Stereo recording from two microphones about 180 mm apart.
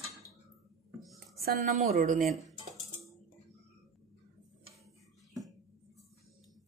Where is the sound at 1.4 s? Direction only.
55° right (ahead or behind).